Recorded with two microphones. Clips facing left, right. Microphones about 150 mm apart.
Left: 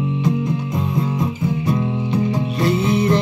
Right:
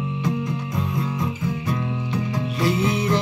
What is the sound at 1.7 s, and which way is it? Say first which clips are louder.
Music: left 6 dB; 25° left (ahead or behind).